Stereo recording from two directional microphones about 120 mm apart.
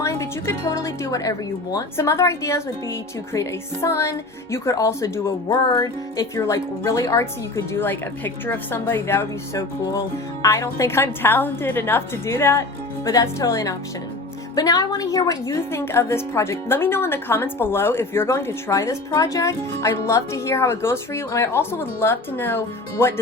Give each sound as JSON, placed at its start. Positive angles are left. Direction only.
{"t": 0.0, "sound": "a woman's voice", "side_deg": 25}